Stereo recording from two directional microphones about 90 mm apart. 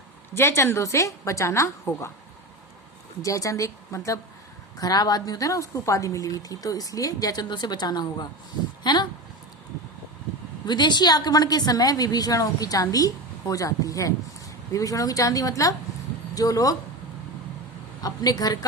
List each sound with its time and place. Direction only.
0.3 s a woman's voice: 25° left (ahead or behind)
3.2 s a woman's voice: 40° left (ahead or behind)
4.8 s speech: 45° left (ahead or behind)
10.7 s a woman's voice: 55° left (ahead or behind)
18.0 s speech: 45° left (ahead or behind)